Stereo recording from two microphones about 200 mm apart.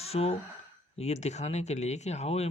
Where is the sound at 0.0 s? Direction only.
30° left (ahead or behind).